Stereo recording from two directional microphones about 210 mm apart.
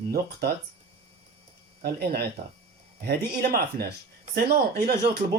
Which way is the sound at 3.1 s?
45° right (ahead or behind).